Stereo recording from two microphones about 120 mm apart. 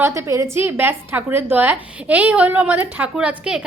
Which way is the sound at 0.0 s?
25° right (ahead or behind).